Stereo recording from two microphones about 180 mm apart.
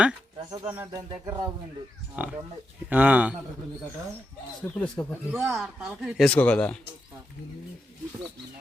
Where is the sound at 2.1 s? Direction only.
5° right (ahead or behind).